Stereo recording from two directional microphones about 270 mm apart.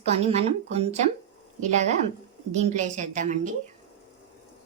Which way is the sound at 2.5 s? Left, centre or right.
Right.